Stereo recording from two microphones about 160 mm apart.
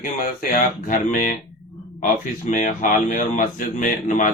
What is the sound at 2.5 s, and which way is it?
Speech, 55° left (ahead or behind).